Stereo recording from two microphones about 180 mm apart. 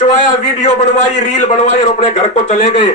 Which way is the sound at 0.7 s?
40° left (ahead or behind).